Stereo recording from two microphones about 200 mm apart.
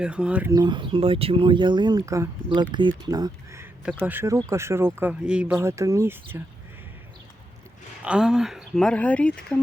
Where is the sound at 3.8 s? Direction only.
5° right (ahead or behind).